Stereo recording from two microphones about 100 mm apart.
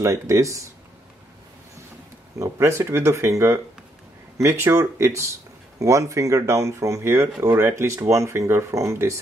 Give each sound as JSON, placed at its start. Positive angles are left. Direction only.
{"t": 0.0, "sound": "speech", "side_deg": -30}
{"t": 2.3, "sound": "speech", "side_deg": -30}